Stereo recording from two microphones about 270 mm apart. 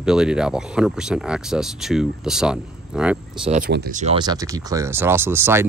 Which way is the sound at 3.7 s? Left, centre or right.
Right.